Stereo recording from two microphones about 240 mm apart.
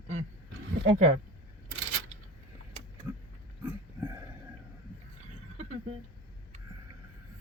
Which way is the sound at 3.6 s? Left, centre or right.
Centre.